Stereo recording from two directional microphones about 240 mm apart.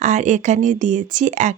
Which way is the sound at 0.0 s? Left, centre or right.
Right.